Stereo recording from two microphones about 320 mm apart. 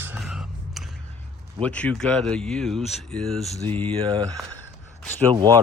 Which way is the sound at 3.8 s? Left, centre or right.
Centre.